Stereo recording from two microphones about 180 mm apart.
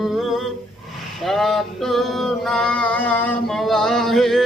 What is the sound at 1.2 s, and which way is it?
Male singing, centre (ahead or behind).